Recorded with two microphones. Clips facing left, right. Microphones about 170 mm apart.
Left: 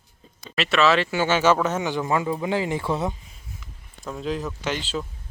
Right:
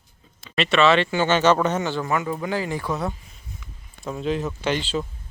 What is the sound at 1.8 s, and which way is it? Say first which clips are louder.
Speech: left 1 dB; 15° left (ahead or behind).